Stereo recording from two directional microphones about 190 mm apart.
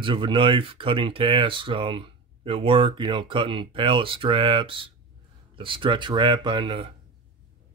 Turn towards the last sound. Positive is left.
turn(degrees=-25)  # may be behind; listen again after turning